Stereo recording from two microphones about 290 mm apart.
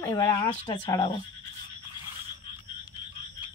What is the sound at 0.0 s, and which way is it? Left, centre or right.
Speech, centre.